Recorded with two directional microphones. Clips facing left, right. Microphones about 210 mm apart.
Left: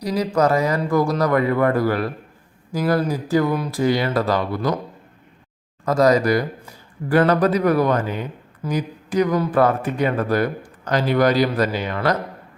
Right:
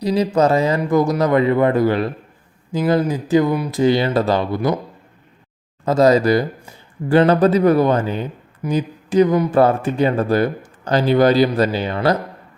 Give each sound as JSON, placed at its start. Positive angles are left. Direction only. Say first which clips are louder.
{"t": 0.0, "sound": "speech", "louder": "right 3 dB", "side_deg": -25}
{"t": 3.8, "sound": "speech", "louder": "right 4 dB", "side_deg": -25}
{"t": 5.8, "sound": "speech", "louder": "right 3 dB", "side_deg": -25}